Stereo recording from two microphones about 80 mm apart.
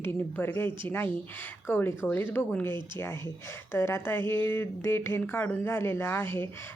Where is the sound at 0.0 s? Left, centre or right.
Left.